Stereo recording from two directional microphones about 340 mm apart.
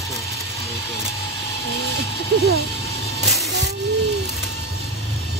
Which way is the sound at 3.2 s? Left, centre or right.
Centre.